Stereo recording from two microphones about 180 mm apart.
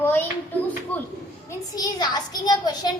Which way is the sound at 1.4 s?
20° left (ahead or behind).